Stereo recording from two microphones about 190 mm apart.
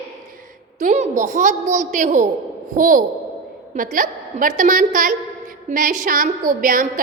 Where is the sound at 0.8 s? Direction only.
40° right (ahead or behind).